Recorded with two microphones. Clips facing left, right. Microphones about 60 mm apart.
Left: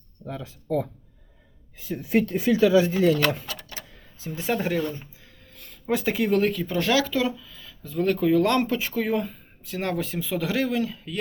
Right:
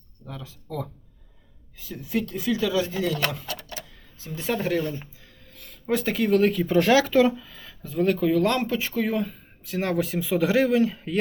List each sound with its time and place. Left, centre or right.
0.3 s speech: left
1.9 s speech: left
4.4 s speech: centre
6.7 s speech: right
7.9 s speech: centre
10.9 s speech: right